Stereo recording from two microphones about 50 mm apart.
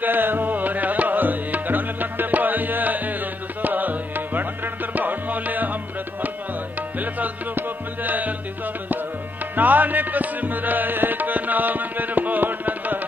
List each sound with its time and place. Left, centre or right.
0.0 s music: right
7.0 s music: right
9.6 s music: right